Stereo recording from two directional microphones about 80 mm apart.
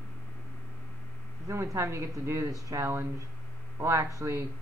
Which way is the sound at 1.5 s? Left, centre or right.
Right.